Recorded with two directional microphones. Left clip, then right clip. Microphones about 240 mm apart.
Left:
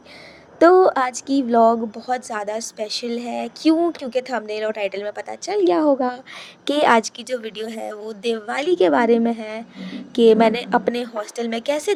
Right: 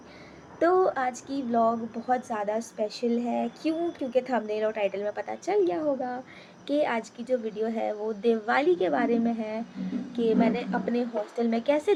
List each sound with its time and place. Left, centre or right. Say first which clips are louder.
0.6 s a woman's voice: left 10 dB; left
7.8 s speech: even; centre
8.5 s a woman's voice: left 7 dB; left